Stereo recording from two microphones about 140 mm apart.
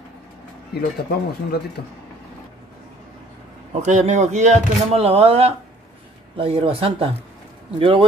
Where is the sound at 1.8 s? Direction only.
90° left.